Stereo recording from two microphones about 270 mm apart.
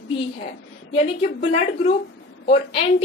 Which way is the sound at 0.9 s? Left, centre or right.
Left.